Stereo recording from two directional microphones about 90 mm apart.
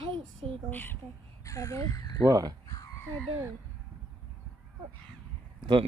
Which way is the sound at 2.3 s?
45° right (ahead or behind).